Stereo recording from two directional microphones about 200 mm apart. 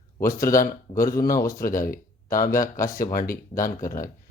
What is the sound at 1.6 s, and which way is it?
Speech, 45° left (ahead or behind).